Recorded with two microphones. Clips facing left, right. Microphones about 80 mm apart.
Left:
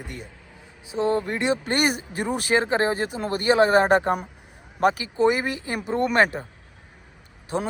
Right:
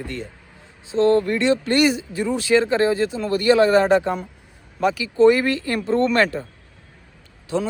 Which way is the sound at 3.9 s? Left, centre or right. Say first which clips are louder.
Right 2 dB; left.